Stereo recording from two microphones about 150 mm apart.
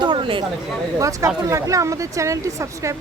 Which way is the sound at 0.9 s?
20° right (ahead or behind).